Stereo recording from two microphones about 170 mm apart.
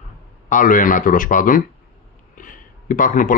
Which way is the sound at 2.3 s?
50° left (ahead or behind).